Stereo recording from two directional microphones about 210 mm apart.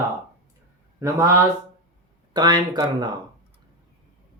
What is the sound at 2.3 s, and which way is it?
Speech, 20° right (ahead or behind).